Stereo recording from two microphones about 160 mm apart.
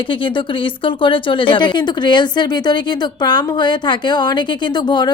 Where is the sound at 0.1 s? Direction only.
30° left (ahead or behind).